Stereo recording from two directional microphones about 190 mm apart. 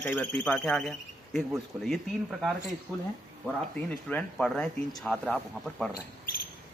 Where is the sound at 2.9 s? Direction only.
15° right (ahead or behind).